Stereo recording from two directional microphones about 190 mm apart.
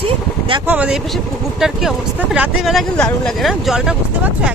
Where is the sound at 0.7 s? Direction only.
5° right (ahead or behind).